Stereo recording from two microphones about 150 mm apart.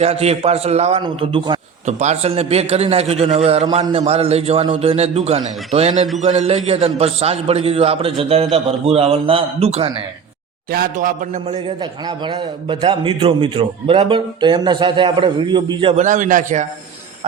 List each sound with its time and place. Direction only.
0.0 s a man's voice: 45° right (ahead or behind)
1.0 s a man's voice: 35° right (ahead or behind)
1.9 s a man's voice: 50° right (ahead or behind)
10.7 s a man's voice: 75° right (ahead or behind)
11.8 s a man's voice: 30° right (ahead or behind)
16.0 s a man's voice: 55° right (ahead or behind)